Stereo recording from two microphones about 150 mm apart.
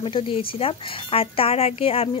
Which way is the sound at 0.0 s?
35° left (ahead or behind).